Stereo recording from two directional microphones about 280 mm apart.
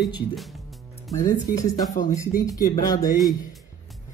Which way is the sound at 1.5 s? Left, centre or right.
Centre.